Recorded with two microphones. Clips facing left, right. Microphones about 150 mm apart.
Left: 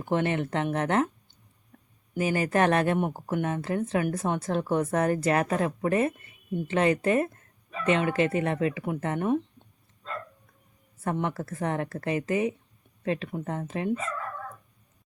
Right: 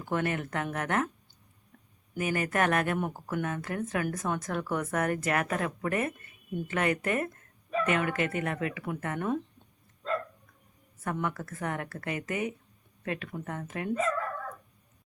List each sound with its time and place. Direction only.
0.0 s speech: 25° left (ahead or behind)
2.1 s speech: 30° left (ahead or behind)
11.0 s speech: 30° left (ahead or behind)